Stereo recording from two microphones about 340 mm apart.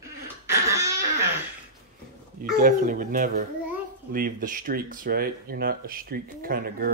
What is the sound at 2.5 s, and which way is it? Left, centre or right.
Speech, right.